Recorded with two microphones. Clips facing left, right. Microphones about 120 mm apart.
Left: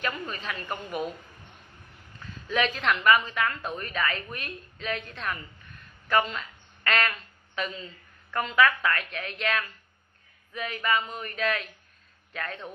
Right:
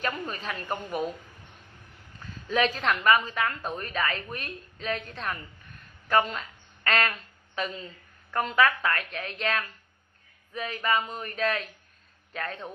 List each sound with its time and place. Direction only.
0.0 s a woman's voice: 40° right (ahead or behind)
0.8 s speech: centre (ahead or behind)
2.2 s a woman's voice: 40° right (ahead or behind)
4.7 s a sound: 35° right (ahead or behind)
8.3 s a woman's voice: 40° right (ahead or behind)